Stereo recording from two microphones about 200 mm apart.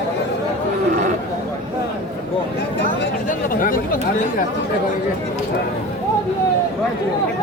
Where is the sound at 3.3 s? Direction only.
45° left (ahead or behind).